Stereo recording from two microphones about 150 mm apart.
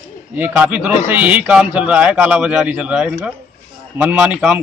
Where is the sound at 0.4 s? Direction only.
10° right (ahead or behind).